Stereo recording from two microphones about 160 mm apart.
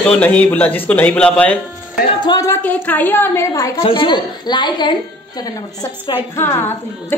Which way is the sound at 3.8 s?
30° left (ahead or behind).